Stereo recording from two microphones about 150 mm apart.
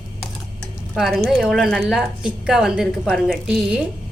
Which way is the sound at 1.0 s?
Centre (ahead or behind).